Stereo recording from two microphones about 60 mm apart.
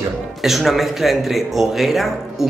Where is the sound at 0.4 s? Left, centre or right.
Centre.